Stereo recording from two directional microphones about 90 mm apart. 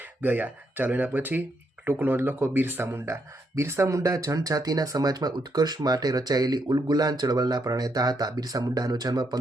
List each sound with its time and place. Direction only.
0.2 s speech: 20° right (ahead or behind)
2.8 s speech: 30° right (ahead or behind)